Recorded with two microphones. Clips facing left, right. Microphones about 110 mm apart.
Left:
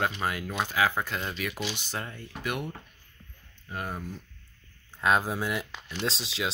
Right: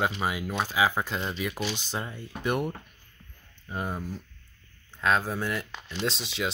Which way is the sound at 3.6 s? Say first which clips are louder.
Right 2 dB; 15° right (ahead or behind).